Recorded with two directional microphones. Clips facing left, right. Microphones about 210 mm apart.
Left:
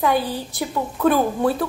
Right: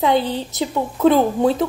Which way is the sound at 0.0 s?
20° right (ahead or behind).